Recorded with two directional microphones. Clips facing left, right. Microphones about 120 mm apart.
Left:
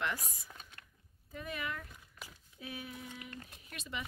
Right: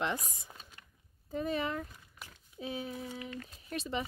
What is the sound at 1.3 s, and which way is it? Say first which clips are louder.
Speech: right 8 dB; 30° right (ahead or behind).